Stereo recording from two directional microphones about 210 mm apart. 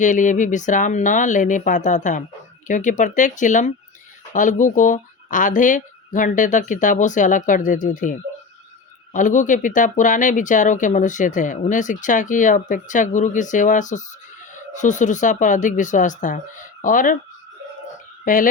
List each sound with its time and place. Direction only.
0.0 s speech: 35° left (ahead or behind)
18.3 s speech: 40° left (ahead or behind)